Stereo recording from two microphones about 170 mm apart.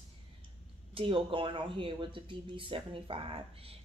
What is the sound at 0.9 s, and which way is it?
Speech, 30° right (ahead or behind).